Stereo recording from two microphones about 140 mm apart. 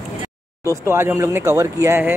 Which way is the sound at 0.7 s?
20° right (ahead or behind).